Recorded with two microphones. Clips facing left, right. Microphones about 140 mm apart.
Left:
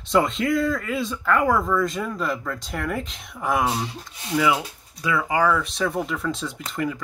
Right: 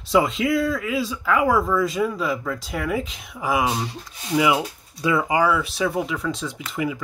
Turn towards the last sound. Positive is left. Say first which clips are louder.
# right 1 dB
turn(degrees=0)  # may be behind; listen again after turning